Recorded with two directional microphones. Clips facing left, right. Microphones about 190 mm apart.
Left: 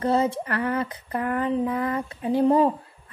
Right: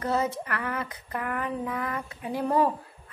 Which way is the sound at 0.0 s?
30° left (ahead or behind).